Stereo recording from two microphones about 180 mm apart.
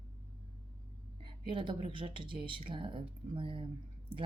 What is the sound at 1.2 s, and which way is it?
Speech, 25° right (ahead or behind).